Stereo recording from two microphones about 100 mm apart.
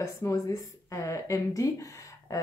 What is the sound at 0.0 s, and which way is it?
Speech, 30° left (ahead or behind).